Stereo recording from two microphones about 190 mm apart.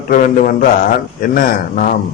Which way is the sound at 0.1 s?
45° left (ahead or behind).